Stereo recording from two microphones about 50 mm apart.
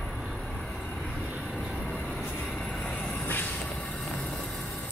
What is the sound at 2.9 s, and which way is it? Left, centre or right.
Vehicle, left.